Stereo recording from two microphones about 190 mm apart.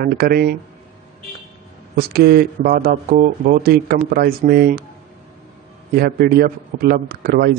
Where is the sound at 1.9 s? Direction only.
55° right (ahead or behind).